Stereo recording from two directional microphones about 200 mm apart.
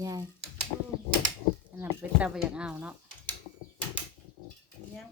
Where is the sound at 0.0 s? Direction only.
20° right (ahead or behind).